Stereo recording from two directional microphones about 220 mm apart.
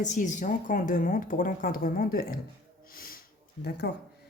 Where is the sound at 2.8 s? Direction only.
40° left (ahead or behind).